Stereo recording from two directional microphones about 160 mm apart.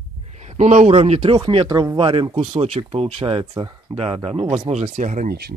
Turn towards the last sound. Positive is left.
turn(degrees=-85)